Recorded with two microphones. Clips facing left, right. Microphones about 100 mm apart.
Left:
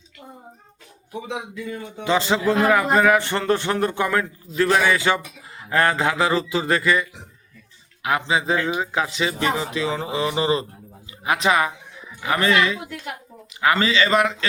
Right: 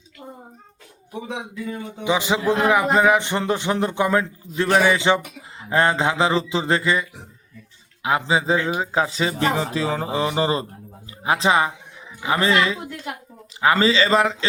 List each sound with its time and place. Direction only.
1.6 s speech: 20° right (ahead or behind)
8.2 s speech: 30° right (ahead or behind)